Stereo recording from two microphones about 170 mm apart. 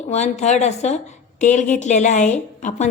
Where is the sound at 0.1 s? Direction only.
40° left (ahead or behind).